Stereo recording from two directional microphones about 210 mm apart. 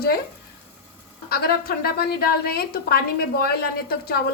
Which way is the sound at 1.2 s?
45° left (ahead or behind).